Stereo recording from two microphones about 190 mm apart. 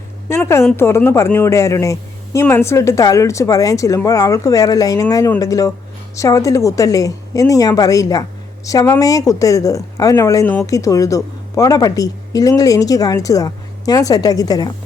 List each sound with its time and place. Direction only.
0.3 s speech: 15° left (ahead or behind)